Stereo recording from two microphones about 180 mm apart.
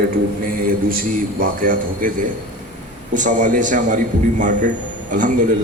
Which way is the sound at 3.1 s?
45° right (ahead or behind).